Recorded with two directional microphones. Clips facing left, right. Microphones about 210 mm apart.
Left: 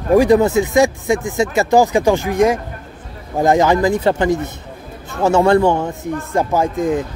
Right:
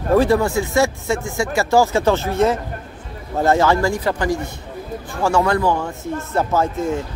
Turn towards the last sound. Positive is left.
turn(degrees=15)  # may be behind; listen again after turning